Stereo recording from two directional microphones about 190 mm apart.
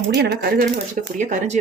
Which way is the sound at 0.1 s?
55° right (ahead or behind).